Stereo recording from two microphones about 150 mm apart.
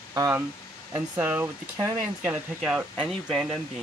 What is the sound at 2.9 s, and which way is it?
Speech, centre (ahead or behind).